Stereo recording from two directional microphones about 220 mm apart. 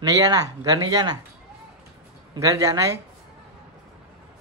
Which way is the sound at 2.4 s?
15° right (ahead or behind).